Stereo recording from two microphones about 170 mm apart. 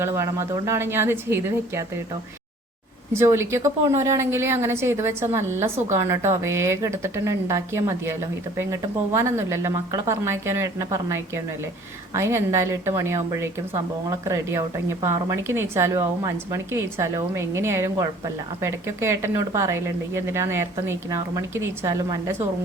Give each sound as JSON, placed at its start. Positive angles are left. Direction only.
{"t": 0.0, "sound": "a woman's voice", "side_deg": -15}
{"t": 3.2, "sound": "a woman's voice", "side_deg": -15}